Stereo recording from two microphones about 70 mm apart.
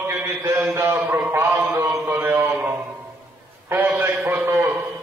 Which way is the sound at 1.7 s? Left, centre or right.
Right.